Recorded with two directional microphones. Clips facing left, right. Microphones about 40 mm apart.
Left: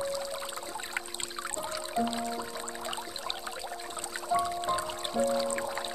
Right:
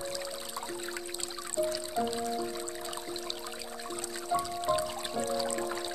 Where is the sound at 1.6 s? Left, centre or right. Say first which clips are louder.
Right 2 dB; left.